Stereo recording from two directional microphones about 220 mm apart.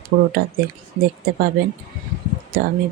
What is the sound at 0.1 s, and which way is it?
Speech, 55° right (ahead or behind).